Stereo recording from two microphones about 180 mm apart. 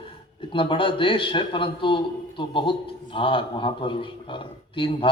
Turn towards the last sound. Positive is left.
turn(degrees=30)  # may be behind; listen again after turning